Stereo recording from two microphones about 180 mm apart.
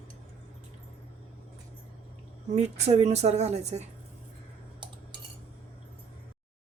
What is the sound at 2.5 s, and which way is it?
A woman's voice, 40° right (ahead or behind).